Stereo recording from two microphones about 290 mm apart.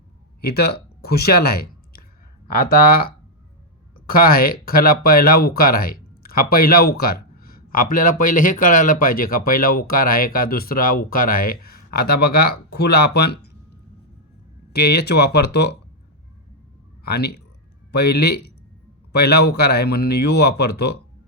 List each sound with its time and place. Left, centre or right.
0.4 s speech: left
4.1 s speech: left
14.7 s speech: left
17.0 s speech: left